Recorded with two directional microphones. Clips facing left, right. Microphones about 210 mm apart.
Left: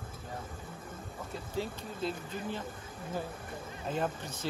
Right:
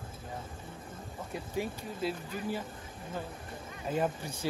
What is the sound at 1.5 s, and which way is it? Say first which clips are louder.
Speech: right 1 dB; 10° right (ahead or behind).